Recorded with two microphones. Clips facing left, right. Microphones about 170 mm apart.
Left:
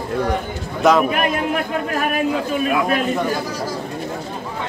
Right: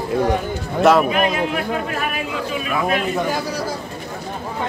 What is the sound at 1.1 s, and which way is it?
A man's voice, 50° left (ahead or behind).